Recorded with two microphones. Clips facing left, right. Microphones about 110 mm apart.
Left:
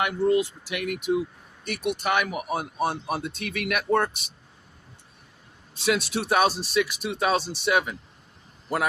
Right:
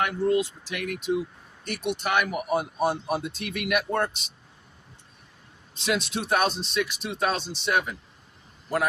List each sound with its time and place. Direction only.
0.0 s speech: 10° left (ahead or behind)
5.7 s speech: centre (ahead or behind)